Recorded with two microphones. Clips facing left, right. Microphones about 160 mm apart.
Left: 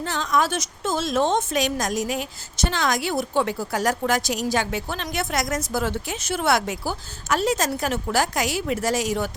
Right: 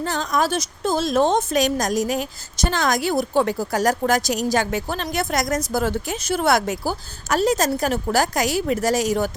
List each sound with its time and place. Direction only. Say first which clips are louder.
0.0 s a woman's voice: right 1 dB; 40° right (ahead or behind)